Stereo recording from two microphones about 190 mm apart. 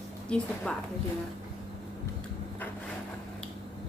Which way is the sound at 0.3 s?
5° left (ahead or behind).